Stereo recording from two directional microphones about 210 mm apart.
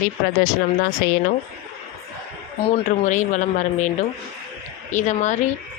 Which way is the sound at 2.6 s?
35° left (ahead or behind).